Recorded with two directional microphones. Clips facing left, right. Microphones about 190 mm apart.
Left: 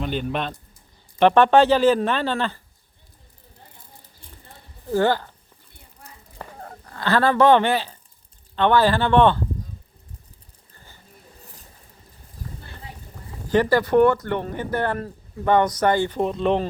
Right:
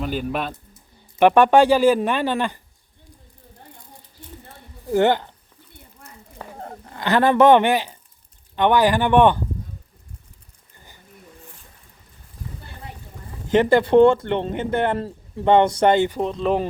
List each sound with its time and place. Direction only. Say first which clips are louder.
0.0 s a man's voice: right 1 dB; 5° right (ahead or behind)
4.9 s speech: right 2 dB; 20° right (ahead or behind)
6.6 s a sound: right 4 dB; 30° right (ahead or behind)
6.9 s speech: right 2 dB; 15° right (ahead or behind)
13.5 s speech: right 3 dB; 20° right (ahead or behind)
16.2 s a man's voice: even; centre (ahead or behind)